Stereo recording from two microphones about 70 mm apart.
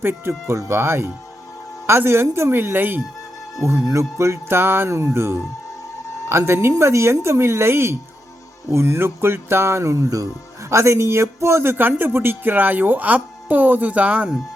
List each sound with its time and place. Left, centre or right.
0.0 s speech: right
3.8 s speech: right